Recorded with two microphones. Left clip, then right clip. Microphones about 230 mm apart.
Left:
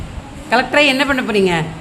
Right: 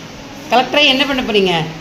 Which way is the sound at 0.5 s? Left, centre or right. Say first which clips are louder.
Right 1 dB; left.